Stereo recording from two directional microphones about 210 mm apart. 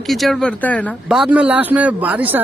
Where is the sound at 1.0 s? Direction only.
5° right (ahead or behind).